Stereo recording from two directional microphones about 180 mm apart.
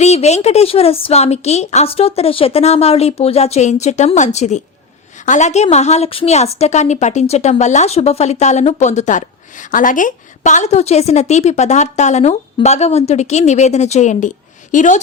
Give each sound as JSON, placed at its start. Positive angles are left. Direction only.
{"t": 0.0, "sound": "a woman's voice", "side_deg": 35}